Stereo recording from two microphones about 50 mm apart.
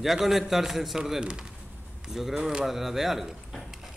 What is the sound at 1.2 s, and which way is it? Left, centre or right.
A man's voice, centre.